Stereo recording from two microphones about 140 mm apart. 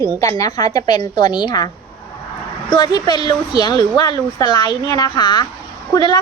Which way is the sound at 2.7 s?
30° left (ahead or behind).